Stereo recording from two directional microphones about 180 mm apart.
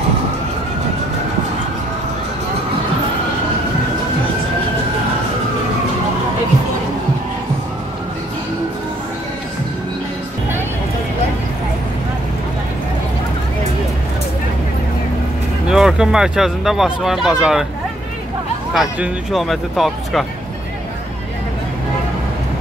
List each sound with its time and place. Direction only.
15.7 s speech: 5° right (ahead or behind)
18.7 s speech: centre (ahead or behind)